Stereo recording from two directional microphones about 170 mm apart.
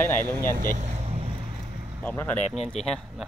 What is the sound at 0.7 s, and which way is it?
Vehicle, 40° right (ahead or behind).